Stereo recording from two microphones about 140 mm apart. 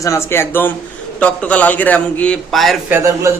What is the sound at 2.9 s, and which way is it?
Speech, 20° right (ahead or behind).